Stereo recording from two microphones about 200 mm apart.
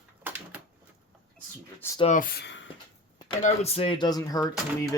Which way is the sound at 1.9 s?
35° left (ahead or behind).